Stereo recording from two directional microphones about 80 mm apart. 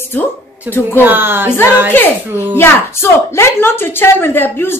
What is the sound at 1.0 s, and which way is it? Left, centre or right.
Speech, right.